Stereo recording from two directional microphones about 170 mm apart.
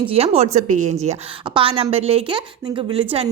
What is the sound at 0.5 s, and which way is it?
Speech, 45° right (ahead or behind).